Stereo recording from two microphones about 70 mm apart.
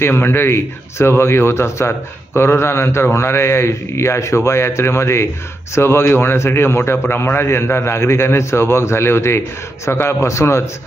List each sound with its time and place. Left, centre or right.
0.0 s a man's voice: left